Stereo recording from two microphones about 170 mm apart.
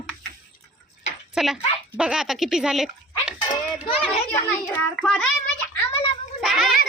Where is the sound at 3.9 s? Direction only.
30° left (ahead or behind).